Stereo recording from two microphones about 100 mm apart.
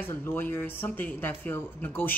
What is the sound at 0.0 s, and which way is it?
Speech, 20° left (ahead or behind).